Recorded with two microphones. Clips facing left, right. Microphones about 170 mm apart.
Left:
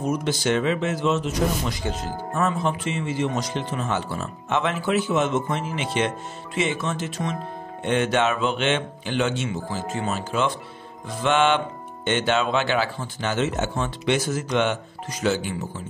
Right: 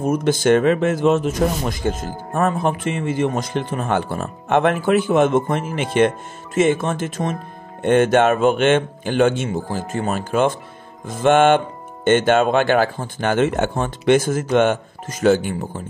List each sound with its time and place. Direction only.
0.0 s speech: 50° right (ahead or behind)